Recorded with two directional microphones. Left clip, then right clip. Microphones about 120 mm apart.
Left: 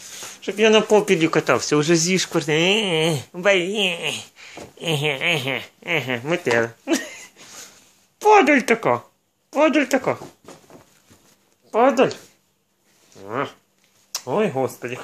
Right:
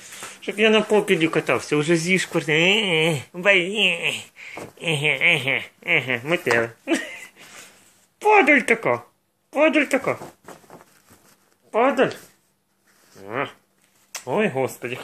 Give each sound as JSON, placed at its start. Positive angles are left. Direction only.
{"t": 0.4, "sound": "speech", "side_deg": 45}
{"t": 0.8, "sound": "speech", "side_deg": 30}
{"t": 6.6, "sound": "a sound", "side_deg": 35}
{"t": 8.2, "sound": "speech", "side_deg": 45}
{"t": 11.7, "sound": "speech", "side_deg": 40}
{"t": 13.2, "sound": "speech", "side_deg": 35}